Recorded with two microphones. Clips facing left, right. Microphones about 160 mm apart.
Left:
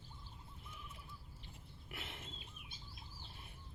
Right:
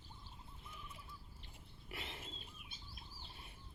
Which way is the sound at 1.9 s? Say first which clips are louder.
Right 1 dB; centre (ahead or behind).